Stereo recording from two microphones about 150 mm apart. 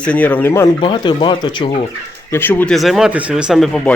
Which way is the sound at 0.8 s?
30° left (ahead or behind).